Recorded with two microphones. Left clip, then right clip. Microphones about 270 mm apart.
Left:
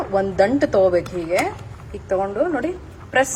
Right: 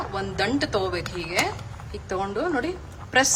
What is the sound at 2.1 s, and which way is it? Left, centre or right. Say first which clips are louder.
Speech: left 6 dB; centre.